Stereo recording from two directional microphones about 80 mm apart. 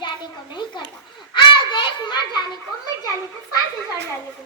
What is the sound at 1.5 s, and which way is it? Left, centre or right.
Children playing, left.